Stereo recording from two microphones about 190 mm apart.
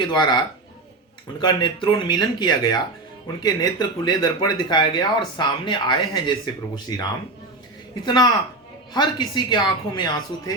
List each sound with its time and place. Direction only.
0.1 s speech: 25° left (ahead or behind)
8.0 s speech: 20° left (ahead or behind)